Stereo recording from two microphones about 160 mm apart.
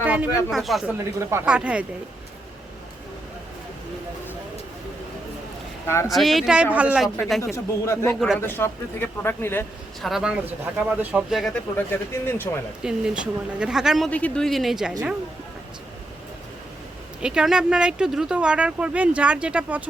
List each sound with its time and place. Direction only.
0.0 s a sound: 10° right (ahead or behind)
0.5 s speech: centre (ahead or behind)
0.9 s speech: 15° right (ahead or behind)
6.1 s speech: centre (ahead or behind)
7.5 s speech: 15° left (ahead or behind)
10.0 s speech: centre (ahead or behind)
11.9 s speech: 15° left (ahead or behind)
12.8 s speech: 5° right (ahead or behind)
14.1 s speech: 10° left (ahead or behind)
17.2 s speech: 5° right (ahead or behind)